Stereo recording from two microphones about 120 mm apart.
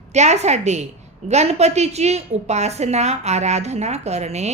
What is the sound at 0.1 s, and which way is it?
A woman's voice, 70° right (ahead or behind).